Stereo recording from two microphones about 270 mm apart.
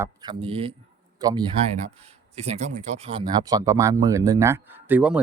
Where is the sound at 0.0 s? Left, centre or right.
Centre.